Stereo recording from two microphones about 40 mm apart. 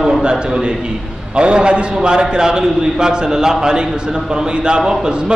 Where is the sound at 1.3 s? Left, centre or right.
Right.